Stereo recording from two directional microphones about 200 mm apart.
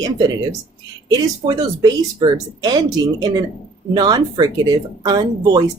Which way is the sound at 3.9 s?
20° right (ahead or behind).